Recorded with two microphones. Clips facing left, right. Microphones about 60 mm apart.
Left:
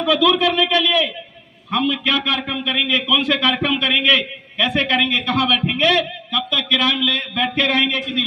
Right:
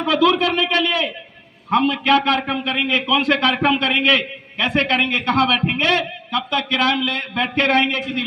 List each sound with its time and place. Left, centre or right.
0.0 s a man's voice: right